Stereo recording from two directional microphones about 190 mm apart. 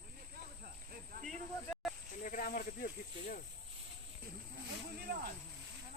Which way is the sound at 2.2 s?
45° left (ahead or behind).